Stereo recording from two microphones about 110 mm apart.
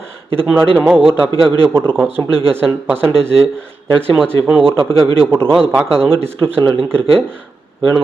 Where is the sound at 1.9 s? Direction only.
20° right (ahead or behind).